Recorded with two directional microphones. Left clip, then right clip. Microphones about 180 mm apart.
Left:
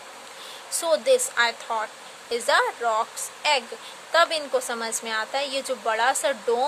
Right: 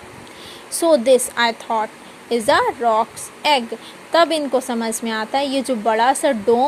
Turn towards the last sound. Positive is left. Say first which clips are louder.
# right 7 dB
turn(degrees=-15)  # may be behind; listen again after turning